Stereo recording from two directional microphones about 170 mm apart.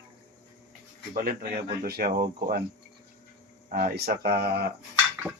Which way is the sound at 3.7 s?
60° right (ahead or behind).